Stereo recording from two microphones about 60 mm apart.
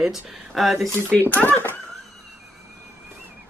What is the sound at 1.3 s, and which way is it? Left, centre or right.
Speech, left.